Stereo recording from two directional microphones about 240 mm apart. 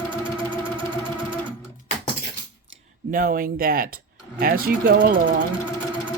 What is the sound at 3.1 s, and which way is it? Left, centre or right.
Speech, right.